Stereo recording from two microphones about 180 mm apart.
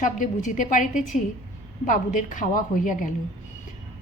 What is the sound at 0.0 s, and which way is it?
Speech, 45° left (ahead or behind).